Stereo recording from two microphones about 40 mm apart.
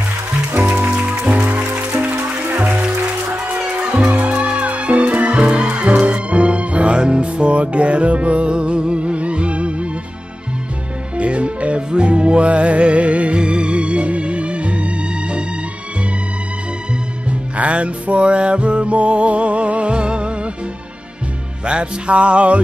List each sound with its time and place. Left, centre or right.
1.2 s music: right
3.5 s music: right
11.1 s music: right
17.3 s music: right
21.6 s music: right